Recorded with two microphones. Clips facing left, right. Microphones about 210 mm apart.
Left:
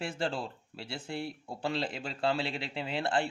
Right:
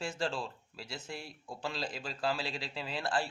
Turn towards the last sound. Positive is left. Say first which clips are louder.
# left 4 dB
turn(degrees=25)  # may be behind; listen again after turning